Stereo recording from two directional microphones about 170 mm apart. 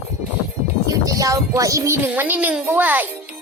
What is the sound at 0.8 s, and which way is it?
Speech, 20° right (ahead or behind).